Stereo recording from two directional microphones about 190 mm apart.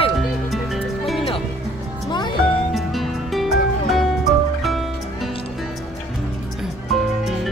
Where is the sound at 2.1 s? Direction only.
25° left (ahead or behind).